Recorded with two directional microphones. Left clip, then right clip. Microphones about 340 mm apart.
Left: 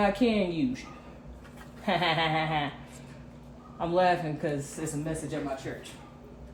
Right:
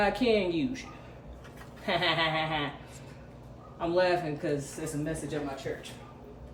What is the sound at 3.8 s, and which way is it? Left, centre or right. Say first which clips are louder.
Speech: left 2 dB; centre.